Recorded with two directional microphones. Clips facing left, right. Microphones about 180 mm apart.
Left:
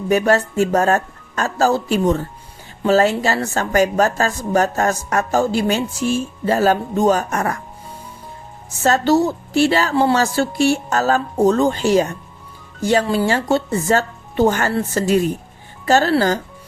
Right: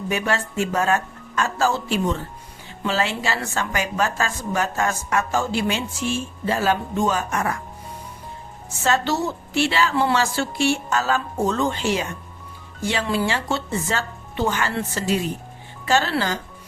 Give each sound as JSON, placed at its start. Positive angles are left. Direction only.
{"t": 0.1, "sound": "a woman's voice", "side_deg": 40}
{"t": 8.8, "sound": "a woman's voice", "side_deg": 40}